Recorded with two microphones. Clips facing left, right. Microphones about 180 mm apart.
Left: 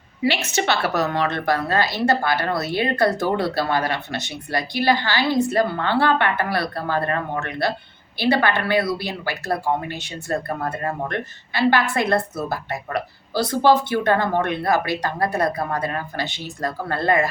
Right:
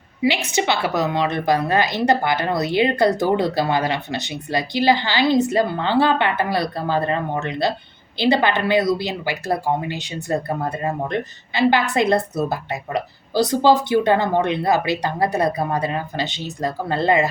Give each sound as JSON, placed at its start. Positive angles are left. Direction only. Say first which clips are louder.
{"t": 0.2, "sound": "a woman's voice", "louder": "right 2 dB", "side_deg": -15}